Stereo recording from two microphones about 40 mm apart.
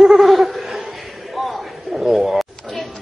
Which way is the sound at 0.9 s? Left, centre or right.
Centre.